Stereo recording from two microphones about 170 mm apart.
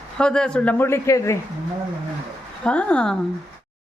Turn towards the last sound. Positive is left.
turn(degrees=5)  # may be behind; listen again after turning